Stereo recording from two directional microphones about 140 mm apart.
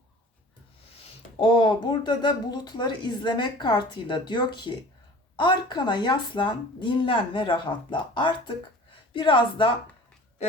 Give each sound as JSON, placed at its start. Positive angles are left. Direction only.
{"t": 1.4, "sound": "speech", "side_deg": 35}